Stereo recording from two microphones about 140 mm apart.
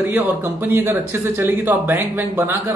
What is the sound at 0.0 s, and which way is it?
A man's voice, 15° right (ahead or behind).